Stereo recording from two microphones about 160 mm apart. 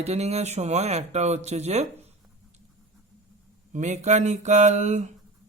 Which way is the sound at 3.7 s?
45° right (ahead or behind).